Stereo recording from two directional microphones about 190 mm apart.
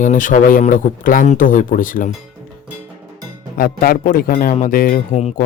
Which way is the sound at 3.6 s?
50° left (ahead or behind).